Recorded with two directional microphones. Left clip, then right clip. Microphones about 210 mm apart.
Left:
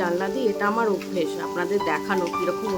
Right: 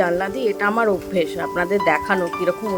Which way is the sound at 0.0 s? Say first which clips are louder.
Right 4 dB; 20° right (ahead or behind).